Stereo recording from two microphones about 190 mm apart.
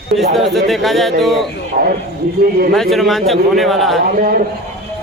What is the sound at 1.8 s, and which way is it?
Speech, 50° right (ahead or behind).